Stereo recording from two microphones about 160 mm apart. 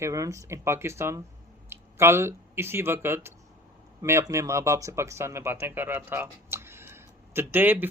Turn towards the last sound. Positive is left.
turn(degrees=-10)  # may be behind; listen again after turning